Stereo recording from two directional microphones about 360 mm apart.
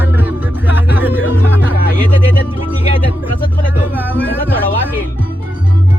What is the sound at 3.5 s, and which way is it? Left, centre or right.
Music, centre.